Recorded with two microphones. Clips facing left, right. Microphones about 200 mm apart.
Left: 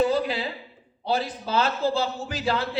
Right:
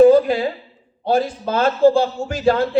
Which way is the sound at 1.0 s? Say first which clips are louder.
Right 8 dB; 50° right (ahead or behind).